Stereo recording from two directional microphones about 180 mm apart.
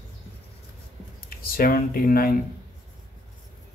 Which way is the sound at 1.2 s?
55° left (ahead or behind).